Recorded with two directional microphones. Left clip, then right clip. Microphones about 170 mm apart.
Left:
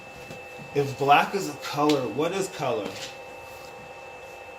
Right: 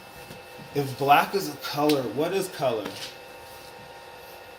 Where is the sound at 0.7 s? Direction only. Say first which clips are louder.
Even; 5° right (ahead or behind).